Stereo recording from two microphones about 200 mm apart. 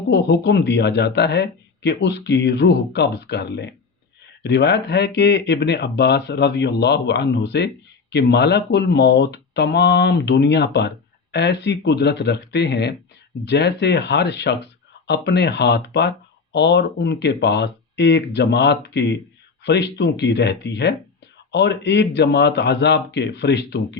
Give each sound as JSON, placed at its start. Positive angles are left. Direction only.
{"t": 0.1, "sound": "speech", "side_deg": 60}